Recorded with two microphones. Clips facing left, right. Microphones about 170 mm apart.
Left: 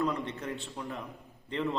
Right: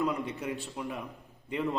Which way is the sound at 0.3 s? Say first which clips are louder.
Right 2 dB; 10° right (ahead or behind).